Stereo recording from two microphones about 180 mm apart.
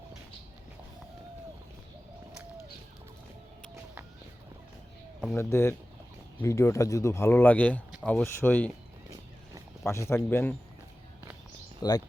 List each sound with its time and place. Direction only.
5.4 s speech: 15° left (ahead or behind)
9.8 s speech: 15° left (ahead or behind)
11.8 s speech: 20° left (ahead or behind)